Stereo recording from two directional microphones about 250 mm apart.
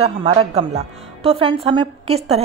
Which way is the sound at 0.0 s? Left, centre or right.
Right.